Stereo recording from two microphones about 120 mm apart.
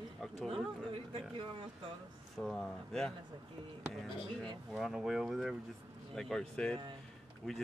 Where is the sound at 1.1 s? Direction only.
45° right (ahead or behind).